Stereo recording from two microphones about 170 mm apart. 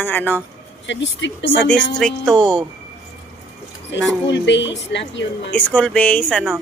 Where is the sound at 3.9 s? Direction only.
90° left.